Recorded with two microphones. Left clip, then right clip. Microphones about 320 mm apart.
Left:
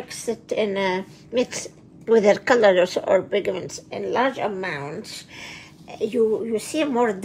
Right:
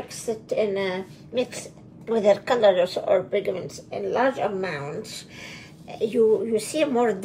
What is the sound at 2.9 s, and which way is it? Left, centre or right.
A woman's voice, left.